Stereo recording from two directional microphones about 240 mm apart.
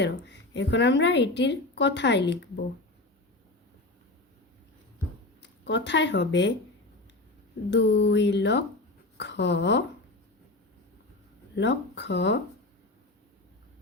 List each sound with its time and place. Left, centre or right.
0.0 s speech: left
5.4 s speech: left
7.7 s a woman's voice: left
11.5 s speech: left